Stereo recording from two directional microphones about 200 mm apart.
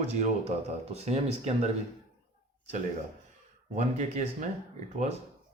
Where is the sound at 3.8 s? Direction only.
35° right (ahead or behind).